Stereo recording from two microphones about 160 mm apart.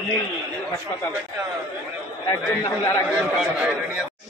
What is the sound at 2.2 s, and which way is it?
Speech, 25° left (ahead or behind).